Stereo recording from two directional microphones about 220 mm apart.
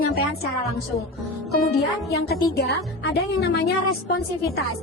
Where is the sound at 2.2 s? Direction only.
45° left (ahead or behind).